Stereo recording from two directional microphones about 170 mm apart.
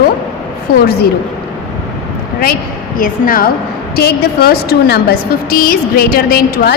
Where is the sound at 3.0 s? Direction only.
55° left (ahead or behind).